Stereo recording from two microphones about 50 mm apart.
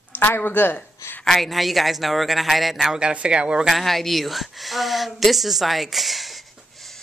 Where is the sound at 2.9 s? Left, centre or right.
Right.